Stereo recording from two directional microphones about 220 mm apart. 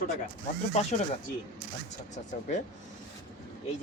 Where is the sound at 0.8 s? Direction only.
30° left (ahead or behind).